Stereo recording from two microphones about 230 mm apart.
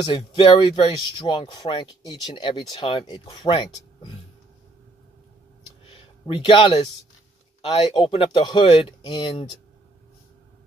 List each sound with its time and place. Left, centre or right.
0.1 s speech: left
6.2 s speech: left